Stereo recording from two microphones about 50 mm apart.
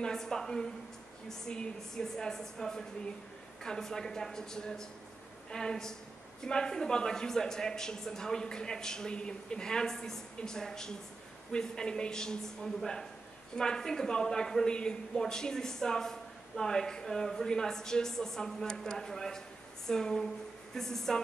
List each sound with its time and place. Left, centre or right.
0.0 s speech: centre
13.6 s speech: centre